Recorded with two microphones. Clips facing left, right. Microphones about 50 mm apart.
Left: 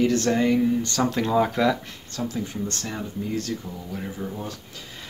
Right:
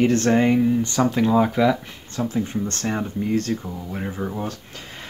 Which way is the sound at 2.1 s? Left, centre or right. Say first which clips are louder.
Right 5 dB; right.